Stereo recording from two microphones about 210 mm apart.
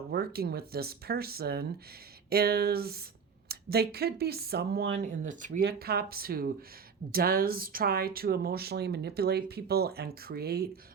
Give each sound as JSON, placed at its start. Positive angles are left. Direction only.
{"t": 0.1, "sound": "speech", "side_deg": -50}
{"t": 4.9, "sound": "speech", "side_deg": -35}